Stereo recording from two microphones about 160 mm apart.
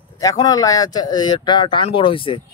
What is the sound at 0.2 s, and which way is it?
Speech, 25° left (ahead or behind).